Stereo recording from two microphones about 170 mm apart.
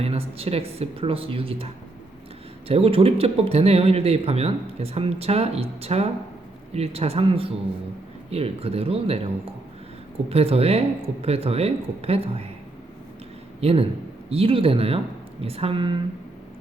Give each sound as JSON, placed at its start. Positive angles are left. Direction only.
{"t": 0.0, "sound": "speech", "side_deg": -35}
{"t": 10.2, "sound": "speech", "side_deg": -35}
{"t": 13.6, "sound": "speech", "side_deg": -35}